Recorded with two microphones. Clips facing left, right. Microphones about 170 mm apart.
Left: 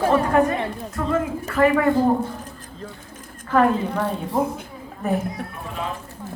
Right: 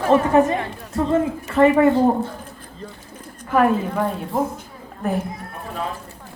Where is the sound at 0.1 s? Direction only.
25° right (ahead or behind).